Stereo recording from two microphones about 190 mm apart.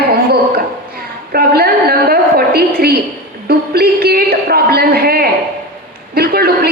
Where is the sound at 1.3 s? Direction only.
55° right (ahead or behind).